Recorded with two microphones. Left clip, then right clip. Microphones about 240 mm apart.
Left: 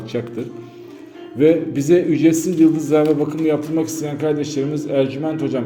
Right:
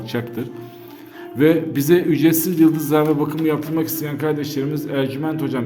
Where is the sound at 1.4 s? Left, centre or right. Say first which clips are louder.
Left 1 dB; right.